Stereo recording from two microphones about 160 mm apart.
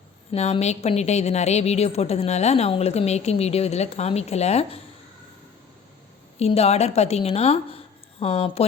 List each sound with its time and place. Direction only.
0.3 s a woman's voice: 40° left (ahead or behind)
6.4 s a woman's voice: 40° left (ahead or behind)